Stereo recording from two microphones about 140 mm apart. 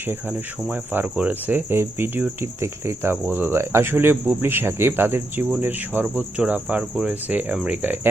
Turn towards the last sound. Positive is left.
turn(degrees=-10)  # may be behind; listen again after turning